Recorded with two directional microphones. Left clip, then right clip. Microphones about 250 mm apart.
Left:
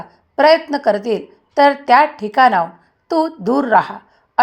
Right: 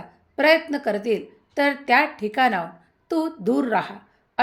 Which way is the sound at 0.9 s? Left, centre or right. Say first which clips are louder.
Left 9 dB; centre.